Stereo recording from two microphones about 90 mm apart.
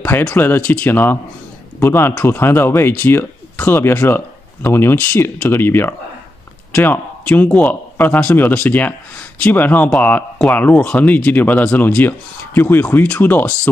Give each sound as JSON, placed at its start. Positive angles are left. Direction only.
{"t": 0.2, "sound": "speech", "side_deg": 20}